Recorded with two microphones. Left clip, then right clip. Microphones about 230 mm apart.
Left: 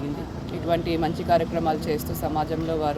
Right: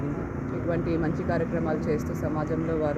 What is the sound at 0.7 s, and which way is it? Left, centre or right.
Speech, centre.